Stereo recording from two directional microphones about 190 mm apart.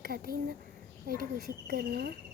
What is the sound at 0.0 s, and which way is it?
Speech, 50° right (ahead or behind).